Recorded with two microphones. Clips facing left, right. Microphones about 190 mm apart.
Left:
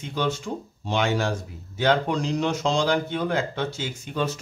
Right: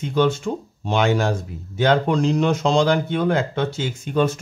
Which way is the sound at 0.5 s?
75° right (ahead or behind).